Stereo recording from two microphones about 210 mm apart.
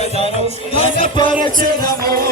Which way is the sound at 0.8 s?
25° left (ahead or behind).